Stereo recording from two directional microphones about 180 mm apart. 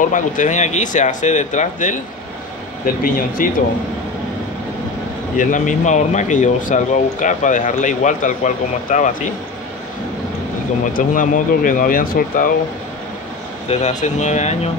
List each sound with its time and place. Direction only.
0.0 s speech: 45° left (ahead or behind)
5.4 s speech: 45° left (ahead or behind)
10.9 s speech: 50° left (ahead or behind)
13.7 s speech: 40° left (ahead or behind)